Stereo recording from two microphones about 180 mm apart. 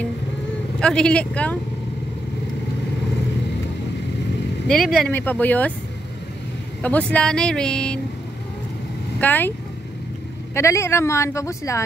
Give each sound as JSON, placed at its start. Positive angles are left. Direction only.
{"t": 0.7, "sound": "speech", "side_deg": 5}
{"t": 4.6, "sound": "speech", "side_deg": 0}
{"t": 6.8, "sound": "speech", "side_deg": 10}
{"t": 9.2, "sound": "speech", "side_deg": 10}
{"t": 10.5, "sound": "speech", "side_deg": 15}